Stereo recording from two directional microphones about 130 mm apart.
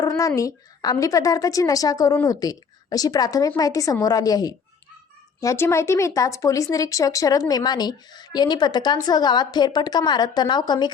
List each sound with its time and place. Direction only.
0.0 s a woman's voice: 25° left (ahead or behind)